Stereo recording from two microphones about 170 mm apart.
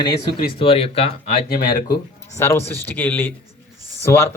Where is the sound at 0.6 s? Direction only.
35° left (ahead or behind).